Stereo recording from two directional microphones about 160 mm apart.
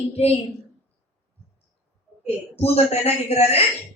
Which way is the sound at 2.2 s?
40° left (ahead or behind).